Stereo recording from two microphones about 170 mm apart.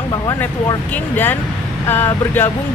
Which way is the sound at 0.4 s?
10° left (ahead or behind).